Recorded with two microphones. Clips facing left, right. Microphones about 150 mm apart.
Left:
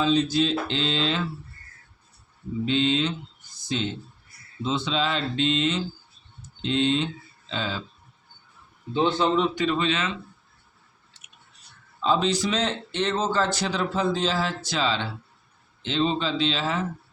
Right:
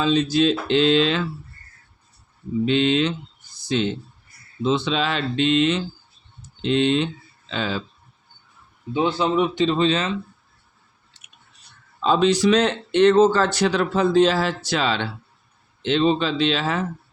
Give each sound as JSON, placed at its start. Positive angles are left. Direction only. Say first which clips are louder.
{"t": 0.0, "sound": "speech", "louder": "right 3 dB", "side_deg": -75}
{"t": 2.6, "sound": "speech", "louder": "right 4 dB", "side_deg": -70}
{"t": 8.9, "sound": "speech", "louder": "right 1 dB", "side_deg": -10}
{"t": 9.6, "sound": "speech", "louder": "right 5 dB", "side_deg": -30}
{"t": 12.0, "sound": "speech", "louder": "right 6 dB", "side_deg": -75}